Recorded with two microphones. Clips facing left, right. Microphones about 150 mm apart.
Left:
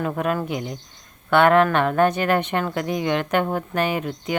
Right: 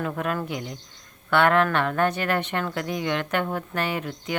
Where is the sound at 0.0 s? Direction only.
20° left (ahead or behind).